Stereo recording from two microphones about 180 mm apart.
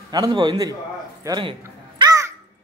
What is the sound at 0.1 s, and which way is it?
A man's voice, 25° right (ahead or behind).